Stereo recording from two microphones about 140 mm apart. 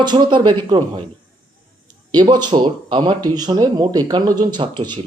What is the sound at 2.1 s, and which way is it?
Speech, 30° right (ahead or behind).